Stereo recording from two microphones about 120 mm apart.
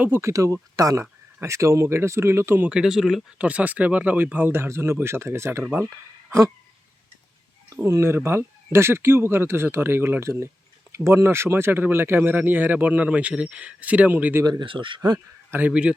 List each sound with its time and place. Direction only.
0.0 s speech: 20° right (ahead or behind)
2.6 s speech: 5° right (ahead or behind); by 5.6 s 20° right (ahead or behind)
7.7 s speech: 25° right (ahead or behind)
14.4 s speech: 40° right (ahead or behind)
15.4 s speech: 15° right (ahead or behind)